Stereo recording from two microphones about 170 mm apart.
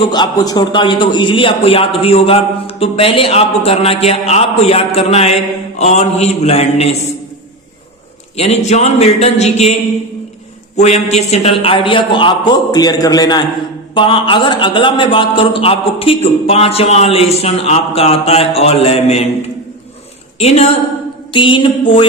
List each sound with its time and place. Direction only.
0.0 s a man's voice: 25° left (ahead or behind)
8.4 s a man's voice: 40° left (ahead or behind)
10.8 s a man's voice: 40° left (ahead or behind)
21.3 s a man's voice: 30° left (ahead or behind)